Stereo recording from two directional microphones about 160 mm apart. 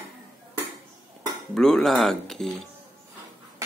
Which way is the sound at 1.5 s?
5° left (ahead or behind).